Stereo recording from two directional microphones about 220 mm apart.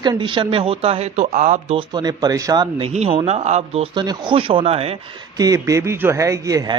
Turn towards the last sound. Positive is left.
turn(degrees=-15)  # may be behind; listen again after turning